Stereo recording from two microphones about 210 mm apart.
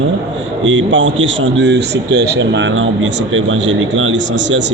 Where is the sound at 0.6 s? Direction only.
65° right (ahead or behind).